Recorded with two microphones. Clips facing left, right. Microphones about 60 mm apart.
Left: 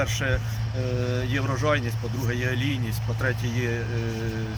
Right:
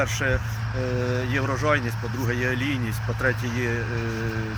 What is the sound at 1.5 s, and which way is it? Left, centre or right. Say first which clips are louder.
Speech: right 1 dB; right.